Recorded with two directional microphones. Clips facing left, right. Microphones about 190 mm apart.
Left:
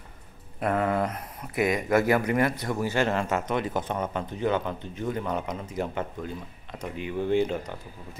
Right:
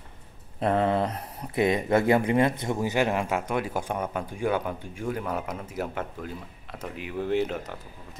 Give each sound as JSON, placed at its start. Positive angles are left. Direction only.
{"t": 0.6, "sound": "speech", "side_deg": -30}